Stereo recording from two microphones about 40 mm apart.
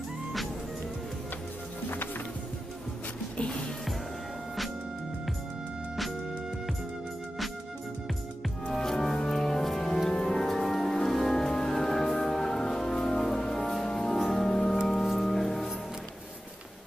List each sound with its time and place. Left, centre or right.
3.3 s music: left
8.7 s music: centre